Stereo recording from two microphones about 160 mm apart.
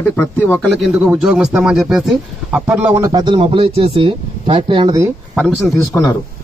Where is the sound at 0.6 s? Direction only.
Centre (ahead or behind); by 5.1 s 25° right (ahead or behind).